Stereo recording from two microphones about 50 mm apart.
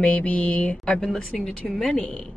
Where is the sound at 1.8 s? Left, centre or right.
Centre.